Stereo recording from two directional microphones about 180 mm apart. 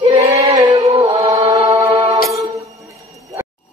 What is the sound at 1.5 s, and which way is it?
Mantra, 35° right (ahead or behind).